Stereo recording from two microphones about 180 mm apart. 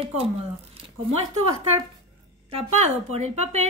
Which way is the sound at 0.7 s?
35° right (ahead or behind).